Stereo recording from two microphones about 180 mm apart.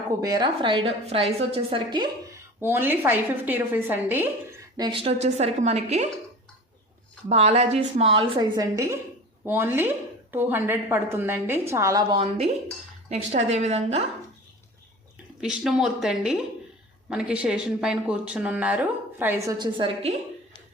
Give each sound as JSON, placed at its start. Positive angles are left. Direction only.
{"t": 0.2, "sound": "a woman's voice", "side_deg": -20}
{"t": 2.6, "sound": "speech", "side_deg": -10}
{"t": 4.8, "sound": "a woman's voice", "side_deg": -30}
{"t": 7.3, "sound": "a woman's voice", "side_deg": -35}
{"t": 12.1, "sound": "a woman's voice", "side_deg": -30}
{"t": 15.4, "sound": "a woman's voice", "side_deg": -5}
{"t": 19.5, "sound": "a woman's voice", "side_deg": -25}